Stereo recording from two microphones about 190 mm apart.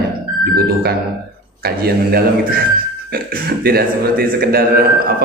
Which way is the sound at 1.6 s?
55° right (ahead or behind).